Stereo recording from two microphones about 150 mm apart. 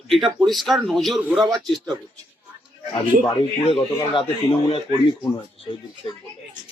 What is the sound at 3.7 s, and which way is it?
Speech, 35° left (ahead or behind).